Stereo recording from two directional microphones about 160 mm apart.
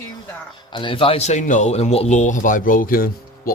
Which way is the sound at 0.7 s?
35° left (ahead or behind).